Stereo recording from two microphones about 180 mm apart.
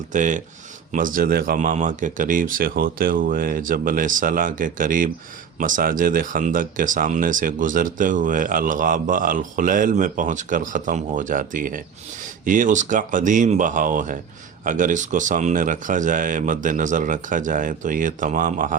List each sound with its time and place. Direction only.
0.1 s speech: 45° right (ahead or behind)